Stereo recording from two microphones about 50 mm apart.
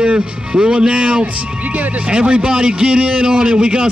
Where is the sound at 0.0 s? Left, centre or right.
Centre.